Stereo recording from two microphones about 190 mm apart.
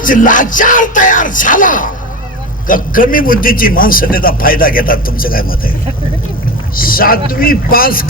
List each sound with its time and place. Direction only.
0.0 s a man's voice: 45° left (ahead or behind)
6.7 s a man's voice: 50° left (ahead or behind)